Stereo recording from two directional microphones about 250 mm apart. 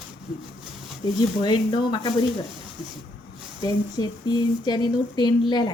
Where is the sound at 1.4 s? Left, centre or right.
Centre.